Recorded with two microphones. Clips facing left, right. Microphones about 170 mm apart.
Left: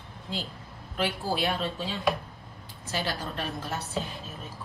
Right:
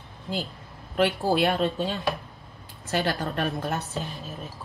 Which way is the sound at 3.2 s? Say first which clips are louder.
Right 6 dB; 65° right (ahead or behind).